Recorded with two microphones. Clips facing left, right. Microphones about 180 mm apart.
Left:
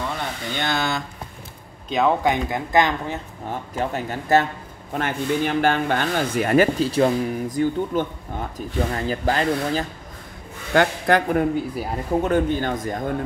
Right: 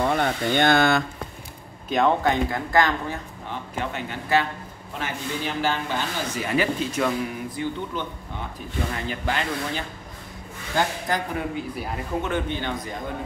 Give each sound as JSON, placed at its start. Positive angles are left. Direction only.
{"t": 0.0, "sound": "speech", "side_deg": -55}
{"t": 1.9, "sound": "speech", "side_deg": 0}
{"t": 2.2, "sound": "speech", "side_deg": 20}
{"t": 3.4, "sound": "speech", "side_deg": 40}
{"t": 4.9, "sound": "speech", "side_deg": 55}
{"t": 6.8, "sound": "speech", "side_deg": 35}
{"t": 10.7, "sound": "speech", "side_deg": 65}
{"t": 11.7, "sound": "speech", "side_deg": 40}